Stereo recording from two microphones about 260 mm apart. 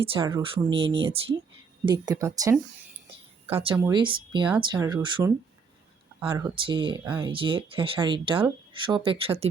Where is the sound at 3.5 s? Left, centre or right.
Centre.